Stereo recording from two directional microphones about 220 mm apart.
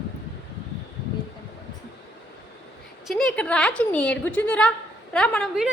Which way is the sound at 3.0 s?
Centre (ahead or behind).